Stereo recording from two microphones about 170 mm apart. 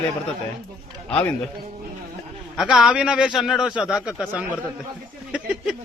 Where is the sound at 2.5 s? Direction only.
Centre (ahead or behind).